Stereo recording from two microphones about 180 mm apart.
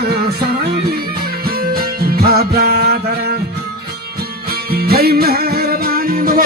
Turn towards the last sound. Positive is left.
turn(degrees=-55)  # may be behind; listen again after turning